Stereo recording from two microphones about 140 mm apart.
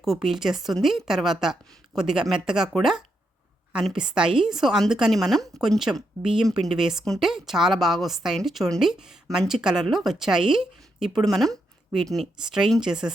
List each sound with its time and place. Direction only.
0.0 s a woman's voice: centre (ahead or behind)